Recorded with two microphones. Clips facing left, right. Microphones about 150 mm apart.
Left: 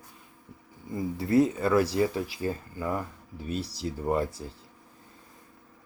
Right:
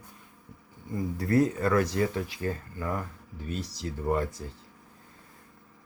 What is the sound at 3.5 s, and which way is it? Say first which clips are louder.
Speech: left 3 dB; 35° left (ahead or behind).